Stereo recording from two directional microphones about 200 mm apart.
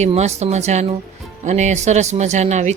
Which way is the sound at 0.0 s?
35° right (ahead or behind).